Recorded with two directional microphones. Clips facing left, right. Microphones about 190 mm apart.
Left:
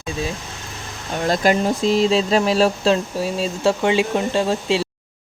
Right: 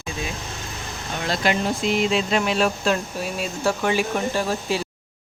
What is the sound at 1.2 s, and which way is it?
Speech, 45° left (ahead or behind).